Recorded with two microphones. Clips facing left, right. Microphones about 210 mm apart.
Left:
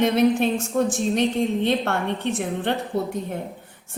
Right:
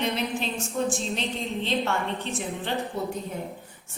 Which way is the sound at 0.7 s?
45° left (ahead or behind).